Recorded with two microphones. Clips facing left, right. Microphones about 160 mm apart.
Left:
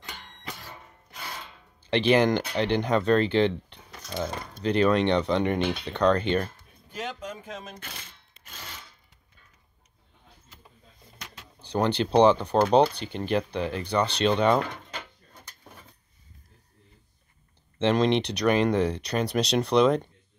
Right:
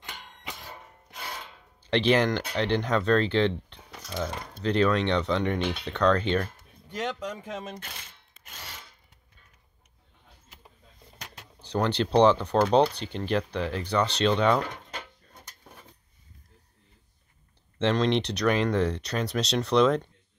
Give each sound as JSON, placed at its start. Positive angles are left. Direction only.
{"t": 0.1, "sound": "a sound", "side_deg": -5}
{"t": 1.9, "sound": "speech", "side_deg": 5}
{"t": 3.9, "sound": "cutlery", "side_deg": -5}
{"t": 4.2, "sound": "speech", "side_deg": 5}
{"t": 6.9, "sound": "speech", "side_deg": -75}
{"t": 11.6, "sound": "speech", "side_deg": 5}
{"t": 17.7, "sound": "speech", "side_deg": 5}